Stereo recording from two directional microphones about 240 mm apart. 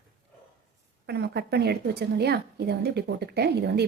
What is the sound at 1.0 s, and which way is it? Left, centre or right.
A woman's voice, right.